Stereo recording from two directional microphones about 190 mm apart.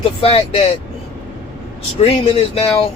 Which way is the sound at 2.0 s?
30° left (ahead or behind).